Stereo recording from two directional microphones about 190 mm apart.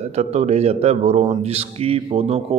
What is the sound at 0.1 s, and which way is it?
A man's voice, 35° right (ahead or behind).